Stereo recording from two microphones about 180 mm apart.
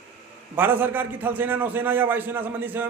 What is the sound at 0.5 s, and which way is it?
A man's voice, 10° right (ahead or behind).